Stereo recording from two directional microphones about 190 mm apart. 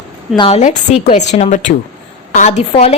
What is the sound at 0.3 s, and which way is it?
A woman's voice, 30° left (ahead or behind).